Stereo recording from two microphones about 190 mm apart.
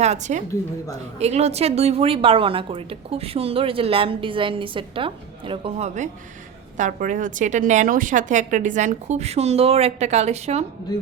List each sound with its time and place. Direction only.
0.0 s a woman's voice: 35° right (ahead or behind)
10.9 s music: 20° left (ahead or behind)